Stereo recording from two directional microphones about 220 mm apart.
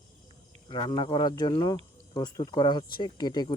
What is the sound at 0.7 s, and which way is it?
Speech, 20° left (ahead or behind).